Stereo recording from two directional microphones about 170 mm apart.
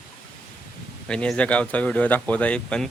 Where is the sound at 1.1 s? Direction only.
5° left (ahead or behind).